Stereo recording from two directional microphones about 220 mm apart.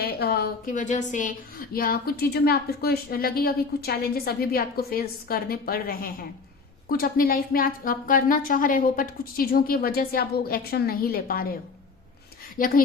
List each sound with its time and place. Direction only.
0.0 s a woman's voice: 45° left (ahead or behind)
12.5 s speech: 40° left (ahead or behind)